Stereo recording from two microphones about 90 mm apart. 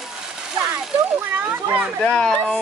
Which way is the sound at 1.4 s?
25° right (ahead or behind).